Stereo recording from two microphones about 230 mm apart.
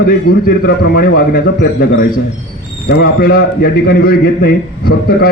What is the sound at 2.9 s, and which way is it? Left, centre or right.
A man's voice, left.